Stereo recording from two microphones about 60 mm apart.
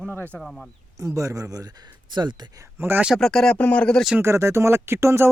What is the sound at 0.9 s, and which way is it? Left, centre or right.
Speech, right.